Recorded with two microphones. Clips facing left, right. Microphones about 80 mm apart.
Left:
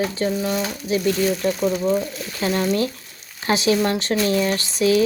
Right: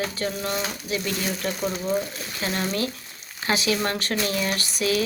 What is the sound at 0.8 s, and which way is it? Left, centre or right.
Speech, left.